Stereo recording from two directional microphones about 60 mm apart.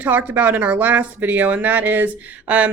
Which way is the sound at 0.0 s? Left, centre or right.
Right.